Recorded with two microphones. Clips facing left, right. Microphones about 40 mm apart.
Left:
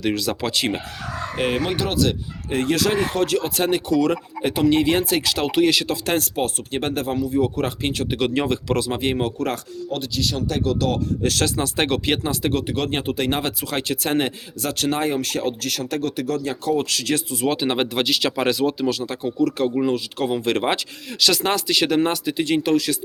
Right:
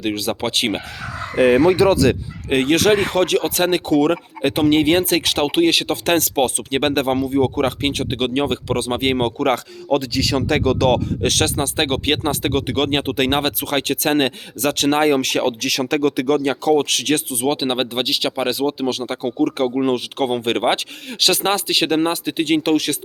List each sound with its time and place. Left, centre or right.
0.0 s speech: right
2.5 s speech: right
6.1 s speech: right
8.7 s speech: right
10.2 s speech: right
11.2 s speech: right
11.4 s speech: right
12.3 s speech: right
16.8 s speech: right
17.5 s speech: right
18.0 s speech: centre
18.5 s speech: right
18.9 s speech: right